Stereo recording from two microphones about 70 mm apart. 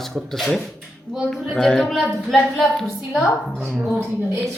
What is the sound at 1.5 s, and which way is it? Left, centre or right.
Speech, centre.